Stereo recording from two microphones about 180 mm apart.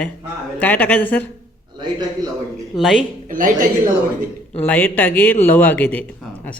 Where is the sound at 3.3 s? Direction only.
50° right (ahead or behind).